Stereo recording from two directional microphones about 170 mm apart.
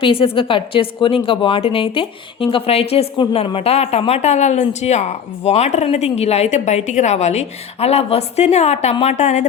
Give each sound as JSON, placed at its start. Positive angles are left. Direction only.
{"t": 0.0, "sound": "speech", "side_deg": 30}